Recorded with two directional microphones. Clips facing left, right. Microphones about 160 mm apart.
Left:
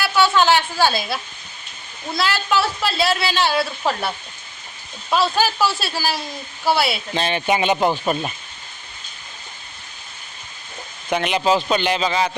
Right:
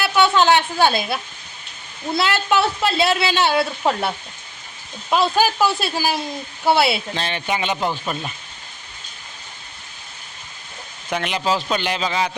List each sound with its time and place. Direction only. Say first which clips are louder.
0.0 s a woman's voice: right 1 dB; 20° right (ahead or behind)
5.1 s a woman's voice: right 1 dB; 15° right (ahead or behind)
7.2 s speech: left 4 dB; 10° left (ahead or behind)
11.1 s a man's voice: left 3 dB; 5° left (ahead or behind)